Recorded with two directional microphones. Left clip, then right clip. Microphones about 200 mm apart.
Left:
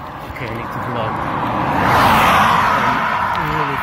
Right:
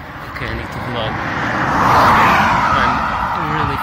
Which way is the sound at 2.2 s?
35° left (ahead or behind).